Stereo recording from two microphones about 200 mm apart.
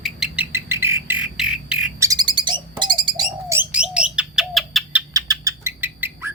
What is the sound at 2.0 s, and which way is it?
Bird, 20° right (ahead or behind).